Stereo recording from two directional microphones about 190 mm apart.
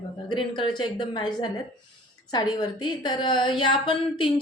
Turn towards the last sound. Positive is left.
turn(degrees=30)  # may be behind; listen again after turning